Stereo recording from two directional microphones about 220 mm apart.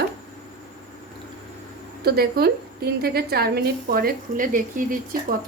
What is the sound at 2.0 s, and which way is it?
A woman's voice, 45° right (ahead or behind).